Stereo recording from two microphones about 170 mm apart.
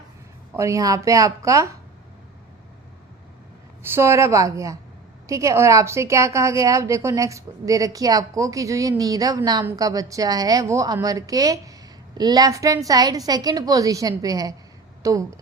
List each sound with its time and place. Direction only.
0.5 s a woman's voice: 15° right (ahead or behind)
3.8 s a woman's voice: 15° right (ahead or behind)